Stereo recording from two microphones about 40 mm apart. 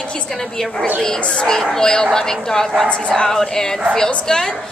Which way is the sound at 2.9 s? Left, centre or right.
Left.